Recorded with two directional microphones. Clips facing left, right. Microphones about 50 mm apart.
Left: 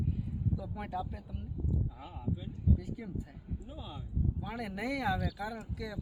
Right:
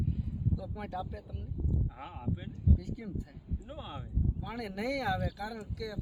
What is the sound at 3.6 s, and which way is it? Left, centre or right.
Speech, right.